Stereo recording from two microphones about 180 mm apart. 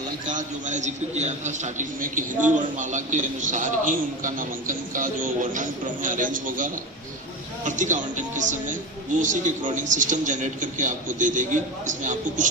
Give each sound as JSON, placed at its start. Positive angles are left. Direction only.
{"t": 0.3, "sound": "a man's voice", "side_deg": -45}